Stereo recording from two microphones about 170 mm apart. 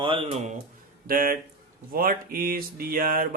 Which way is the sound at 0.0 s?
30° right (ahead or behind).